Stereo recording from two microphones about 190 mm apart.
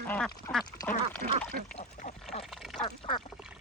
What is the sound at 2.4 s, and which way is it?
Duck, centre (ahead or behind).